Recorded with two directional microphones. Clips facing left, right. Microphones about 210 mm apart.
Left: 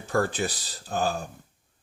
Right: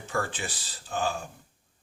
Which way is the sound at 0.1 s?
40° left (ahead or behind).